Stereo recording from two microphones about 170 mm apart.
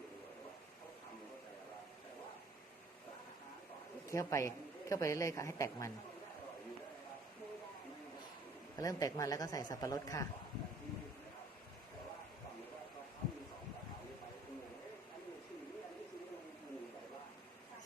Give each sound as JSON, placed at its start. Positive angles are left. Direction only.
{"t": 4.1, "sound": "a woman's voice", "side_deg": 20}
{"t": 8.8, "sound": "speech", "side_deg": 20}